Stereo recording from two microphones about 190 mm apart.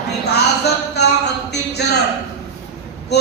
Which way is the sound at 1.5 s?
60° left (ahead or behind).